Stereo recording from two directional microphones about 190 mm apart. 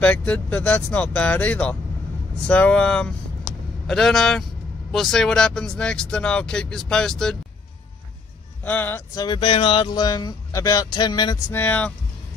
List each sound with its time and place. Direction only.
0.0 s speech: 5° left (ahead or behind)
8.6 s speech: 10° left (ahead or behind)
11.5 s speech: 10° left (ahead or behind)